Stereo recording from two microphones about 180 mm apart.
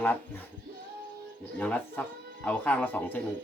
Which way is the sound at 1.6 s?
5° left (ahead or behind).